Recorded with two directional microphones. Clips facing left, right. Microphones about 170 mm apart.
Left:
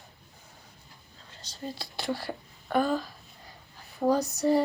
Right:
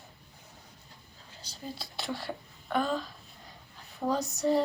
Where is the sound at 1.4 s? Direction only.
Centre (ahead or behind).